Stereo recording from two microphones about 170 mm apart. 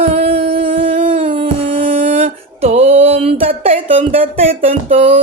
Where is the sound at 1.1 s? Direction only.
30° right (ahead or behind).